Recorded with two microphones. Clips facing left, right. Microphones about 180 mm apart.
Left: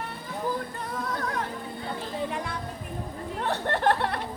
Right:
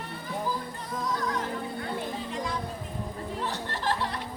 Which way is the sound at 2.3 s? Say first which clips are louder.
Even; 60° left (ahead or behind).